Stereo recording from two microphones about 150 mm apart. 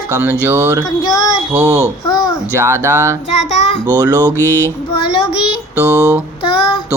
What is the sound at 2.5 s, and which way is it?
Speech, 20° right (ahead or behind).